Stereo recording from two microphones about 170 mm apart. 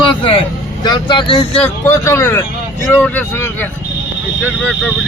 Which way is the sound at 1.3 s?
10° left (ahead or behind).